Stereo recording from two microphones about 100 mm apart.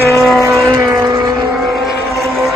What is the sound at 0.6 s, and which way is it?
Vehicle, 30° right (ahead or behind).